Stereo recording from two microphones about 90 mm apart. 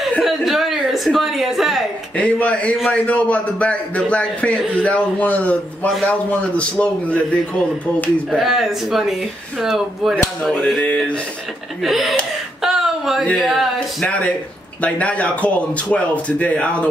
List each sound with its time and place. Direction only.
0.2 s speech: 5° right (ahead or behind)
2.1 s a man's voice: 15° left (ahead or behind)
8.4 s a man's voice: centre (ahead or behind)
10.8 s a man's voice: 15° left (ahead or behind)
11.8 s a man's voice: centre (ahead or behind)
12.6 s a sound: 5° right (ahead or behind)
13.4 s a man's voice: centre (ahead or behind)
14.0 s a man's voice: 15° left (ahead or behind)